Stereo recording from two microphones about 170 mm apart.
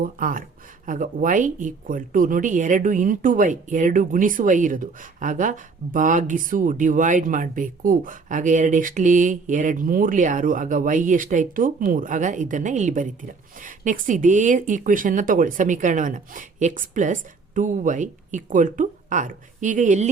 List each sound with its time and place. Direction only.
0.0 s speech: 55° right (ahead or behind)